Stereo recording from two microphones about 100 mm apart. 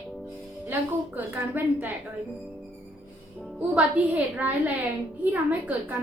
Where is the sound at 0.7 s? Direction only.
20° right (ahead or behind).